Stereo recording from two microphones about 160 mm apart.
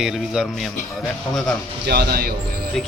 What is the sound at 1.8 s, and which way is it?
Speech, 85° right.